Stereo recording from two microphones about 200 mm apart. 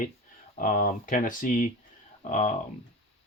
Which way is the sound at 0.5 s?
45° left (ahead or behind).